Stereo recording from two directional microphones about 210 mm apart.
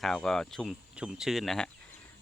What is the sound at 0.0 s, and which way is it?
Speech, centre (ahead or behind).